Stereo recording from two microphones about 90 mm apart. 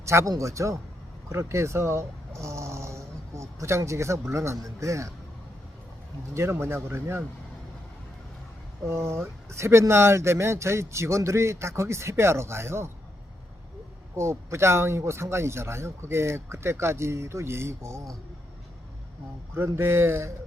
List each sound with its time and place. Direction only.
0.0 s speech: 30° right (ahead or behind)
6.3 s a man's voice: 30° right (ahead or behind)
8.8 s speech: 30° right (ahead or behind)
14.2 s speech: 30° right (ahead or behind)
19.5 s a man's voice: 25° right (ahead or behind)